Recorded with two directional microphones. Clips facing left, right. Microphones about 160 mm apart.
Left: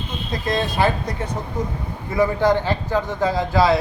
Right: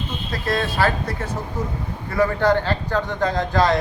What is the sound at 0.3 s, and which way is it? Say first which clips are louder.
A man's voice: left 1 dB; 15° left (ahead or behind).